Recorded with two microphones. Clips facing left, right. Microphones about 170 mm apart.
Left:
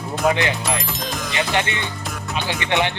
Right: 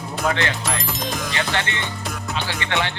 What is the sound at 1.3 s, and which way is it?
Speech, 15° left (ahead or behind).